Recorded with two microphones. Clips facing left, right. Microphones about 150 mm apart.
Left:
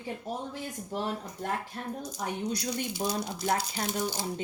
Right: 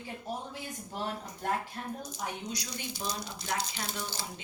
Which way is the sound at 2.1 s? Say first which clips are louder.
Left 5 dB; 55° left (ahead or behind).